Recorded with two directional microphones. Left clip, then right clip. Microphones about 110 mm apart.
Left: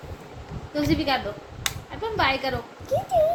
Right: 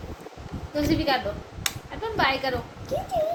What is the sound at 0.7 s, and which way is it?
Speech, 25° right (ahead or behind).